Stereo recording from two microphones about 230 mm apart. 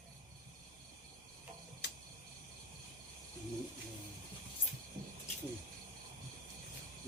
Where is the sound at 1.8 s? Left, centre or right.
Left.